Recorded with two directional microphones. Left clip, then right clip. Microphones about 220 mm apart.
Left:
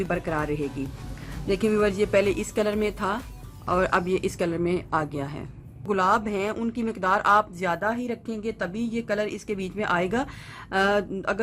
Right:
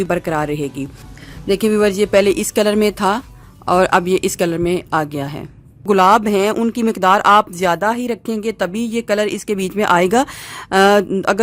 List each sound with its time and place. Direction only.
0.0 s speech: 45° right (ahead or behind)